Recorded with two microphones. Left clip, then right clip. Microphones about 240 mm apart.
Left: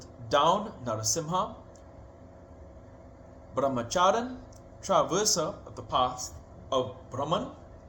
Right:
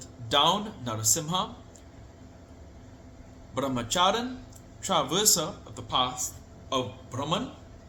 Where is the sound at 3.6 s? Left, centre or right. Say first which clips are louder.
Even; centre.